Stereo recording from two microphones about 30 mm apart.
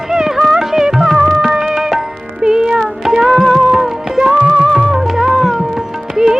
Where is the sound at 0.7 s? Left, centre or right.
Centre.